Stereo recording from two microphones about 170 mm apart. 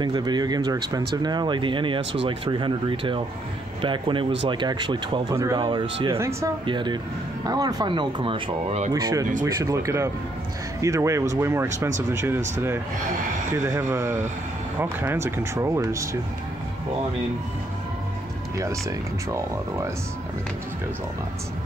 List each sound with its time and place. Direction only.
0.0 s speech: 25° right (ahead or behind)
5.3 s speech: 15° right (ahead or behind)
5.6 s speech: 30° right (ahead or behind)
6.1 s speech: 15° right (ahead or behind)
6.6 s speech: 25° right (ahead or behind)
8.9 s speech: 20° right (ahead or behind)
18.6 s speech: 20° right (ahead or behind)